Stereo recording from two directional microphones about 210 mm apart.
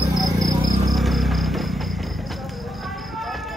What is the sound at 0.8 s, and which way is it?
Music, centre (ahead or behind).